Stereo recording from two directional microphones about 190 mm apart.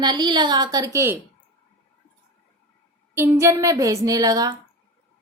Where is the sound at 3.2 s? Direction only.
15° right (ahead or behind).